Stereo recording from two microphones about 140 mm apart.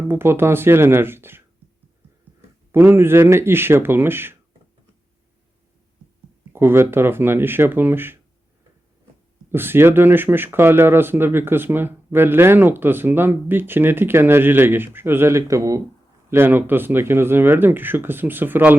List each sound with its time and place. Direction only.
0.1 s speech: 15° right (ahead or behind)
2.7 s speech: 15° right (ahead or behind)
6.5 s speech: 15° right (ahead or behind)
9.5 s speech: 15° right (ahead or behind)